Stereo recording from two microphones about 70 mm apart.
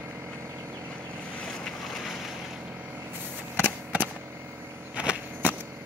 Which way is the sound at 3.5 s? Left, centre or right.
Right.